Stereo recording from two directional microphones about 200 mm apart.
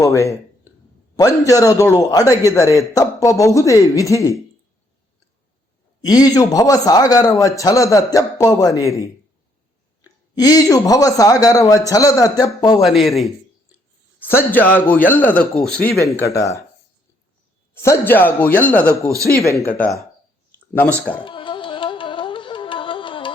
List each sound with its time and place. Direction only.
0.0 s a man's voice: 15° left (ahead or behind)
6.1 s a man's voice: 20° left (ahead or behind)
10.3 s a man's voice: 20° left (ahead or behind)
12.8 s a man's voice: centre (ahead or behind); by 16.6 s 15° left (ahead or behind)
17.7 s a man's voice: 10° left (ahead or behind)
21.2 s music: 25° left (ahead or behind)